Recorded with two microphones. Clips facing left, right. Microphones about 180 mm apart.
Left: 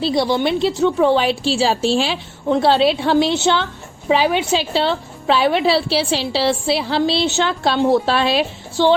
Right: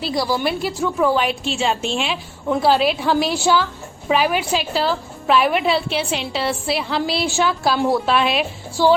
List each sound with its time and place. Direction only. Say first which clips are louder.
0.0 s a woman's voice: left 4 dB; 25° left (ahead or behind)